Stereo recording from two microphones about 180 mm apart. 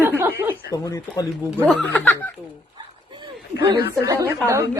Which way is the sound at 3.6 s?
25° right (ahead or behind).